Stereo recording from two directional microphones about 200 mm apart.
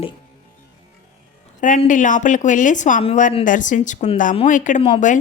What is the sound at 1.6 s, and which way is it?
A woman's voice, 40° left (ahead or behind).